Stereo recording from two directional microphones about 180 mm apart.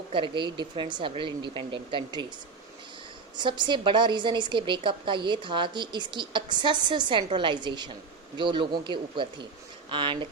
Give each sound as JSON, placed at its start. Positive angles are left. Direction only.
{"t": 0.1, "sound": "a woman's voice", "side_deg": -25}
{"t": 3.3, "sound": "a woman's voice", "side_deg": -25}